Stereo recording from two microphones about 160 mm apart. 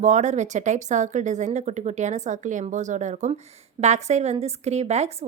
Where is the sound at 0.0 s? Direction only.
45° right (ahead or behind).